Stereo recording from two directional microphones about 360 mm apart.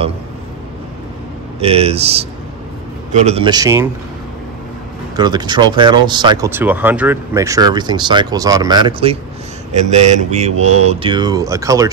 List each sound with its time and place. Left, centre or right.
1.6 s speech: centre
5.1 s speech: centre